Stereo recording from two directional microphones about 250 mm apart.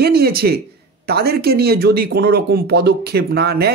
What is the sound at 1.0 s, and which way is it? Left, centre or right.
Speech, right.